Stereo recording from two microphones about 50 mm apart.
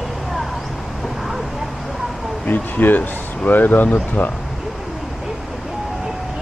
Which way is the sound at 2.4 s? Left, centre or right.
Left.